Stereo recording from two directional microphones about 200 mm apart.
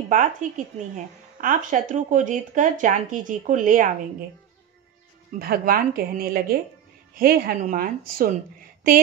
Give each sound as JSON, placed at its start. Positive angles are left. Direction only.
{"t": 0.1, "sound": "speech", "side_deg": -40}
{"t": 5.4, "sound": "speech", "side_deg": -50}